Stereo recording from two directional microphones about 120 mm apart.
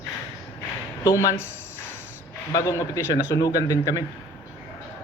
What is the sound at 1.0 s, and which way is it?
Speech, 25° left (ahead or behind).